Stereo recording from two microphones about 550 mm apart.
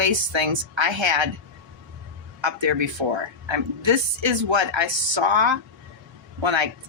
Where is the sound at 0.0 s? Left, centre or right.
Right.